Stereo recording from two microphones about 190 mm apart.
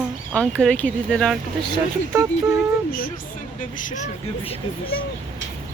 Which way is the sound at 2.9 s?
50° left (ahead or behind).